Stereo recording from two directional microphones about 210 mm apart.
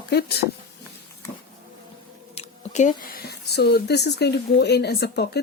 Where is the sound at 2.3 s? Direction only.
35° left (ahead or behind); by 5.4 s 50° left (ahead or behind).